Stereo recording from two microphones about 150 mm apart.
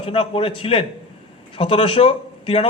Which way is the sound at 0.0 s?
35° left (ahead or behind).